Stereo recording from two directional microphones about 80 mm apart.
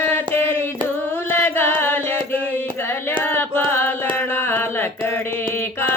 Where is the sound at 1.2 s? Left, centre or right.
Left.